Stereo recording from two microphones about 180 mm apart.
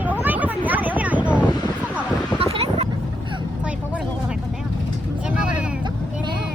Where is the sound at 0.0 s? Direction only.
10° right (ahead or behind).